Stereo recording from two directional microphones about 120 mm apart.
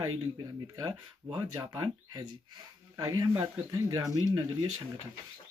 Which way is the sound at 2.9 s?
30° right (ahead or behind).